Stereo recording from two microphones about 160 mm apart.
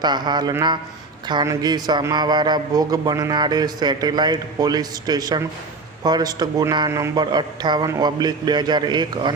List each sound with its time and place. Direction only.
0.0 s a man's voice: 25° right (ahead or behind)